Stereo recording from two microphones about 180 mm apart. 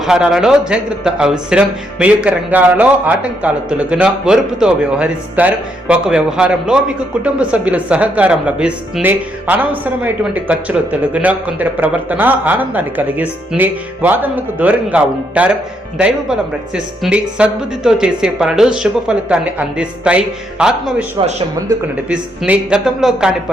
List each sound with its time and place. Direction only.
0.0 s a man's voice: centre (ahead or behind)
21.2 s speech: 25° right (ahead or behind)
22.1 s speech: 5° right (ahead or behind)